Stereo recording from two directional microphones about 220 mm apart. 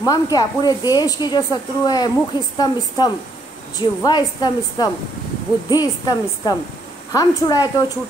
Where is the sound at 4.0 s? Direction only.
20° left (ahead or behind).